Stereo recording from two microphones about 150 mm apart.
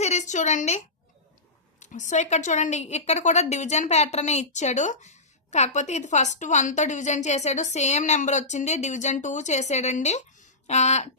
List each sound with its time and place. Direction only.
0.0 s a woman's voice: 50° left (ahead or behind)
1.8 s a woman's voice: 55° left (ahead or behind)